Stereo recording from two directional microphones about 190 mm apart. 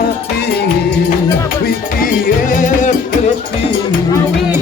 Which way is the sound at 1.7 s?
45° left (ahead or behind).